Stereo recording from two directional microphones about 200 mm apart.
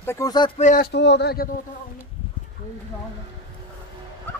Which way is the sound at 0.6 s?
40° left (ahead or behind).